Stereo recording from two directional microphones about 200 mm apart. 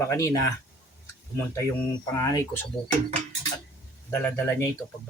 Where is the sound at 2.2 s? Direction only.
15° left (ahead or behind).